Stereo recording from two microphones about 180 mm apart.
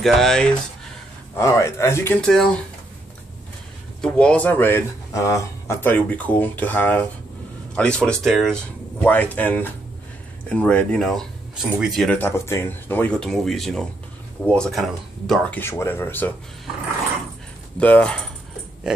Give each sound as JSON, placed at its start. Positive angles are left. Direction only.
{"t": 0.0, "sound": "speech", "side_deg": 0}
{"t": 1.3, "sound": "speech", "side_deg": 15}
{"t": 2.2, "sound": "speech", "side_deg": 5}
{"t": 4.0, "sound": "speech", "side_deg": 5}
{"t": 12.2, "sound": "speech", "side_deg": 15}
{"t": 17.7, "sound": "speech", "side_deg": 10}
{"t": 18.9, "sound": "speech", "side_deg": -5}